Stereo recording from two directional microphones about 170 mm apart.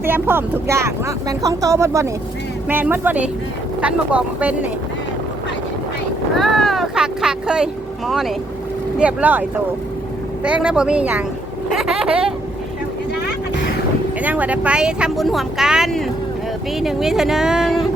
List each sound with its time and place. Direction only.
0.0 s speech: 15° right (ahead or behind)
6.3 s vehicle: centre (ahead or behind)
9.0 s speech: 10° right (ahead or behind)
11.7 s vehicle: 5° right (ahead or behind)
14.2 s speech: 10° right (ahead or behind)